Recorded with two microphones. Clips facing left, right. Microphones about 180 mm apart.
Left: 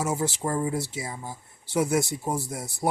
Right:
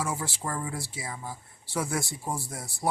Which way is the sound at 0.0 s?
20° left (ahead or behind).